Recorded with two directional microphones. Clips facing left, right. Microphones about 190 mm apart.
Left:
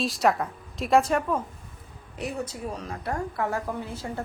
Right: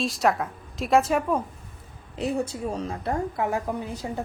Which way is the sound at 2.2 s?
30° right (ahead or behind).